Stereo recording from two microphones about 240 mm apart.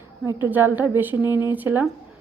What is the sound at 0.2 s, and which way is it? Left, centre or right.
A woman's voice, centre.